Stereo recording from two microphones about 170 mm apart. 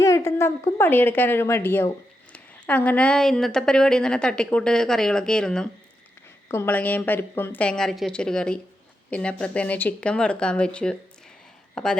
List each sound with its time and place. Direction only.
0.0 s a woman's voice: 15° left (ahead or behind)